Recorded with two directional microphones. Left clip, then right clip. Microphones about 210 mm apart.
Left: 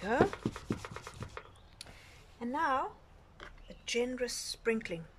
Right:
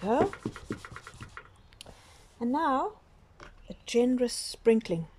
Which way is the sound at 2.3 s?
20° right (ahead or behind).